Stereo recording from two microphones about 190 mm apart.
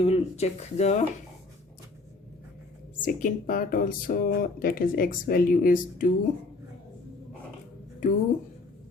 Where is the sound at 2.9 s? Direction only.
45° left (ahead or behind).